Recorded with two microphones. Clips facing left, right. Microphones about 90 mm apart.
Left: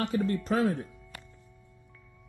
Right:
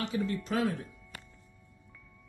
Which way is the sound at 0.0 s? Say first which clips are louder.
Left 4 dB; 45° left (ahead or behind).